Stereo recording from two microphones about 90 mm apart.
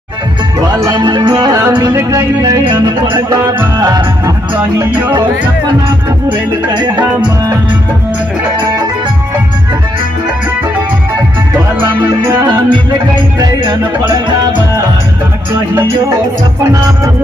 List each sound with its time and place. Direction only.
0.6 s music: 40° right (ahead or behind)
0.9 s music: 55° right (ahead or behind); by 1.7 s 40° right (ahead or behind)
1.7 s music: 50° right (ahead or behind)
2.0 s music: 35° right (ahead or behind)
2.6 s music: 55° right (ahead or behind)
4.6 s music: 20° right (ahead or behind)
12.3 s music: 35° right (ahead or behind)
14.0 s music: 40° right (ahead or behind)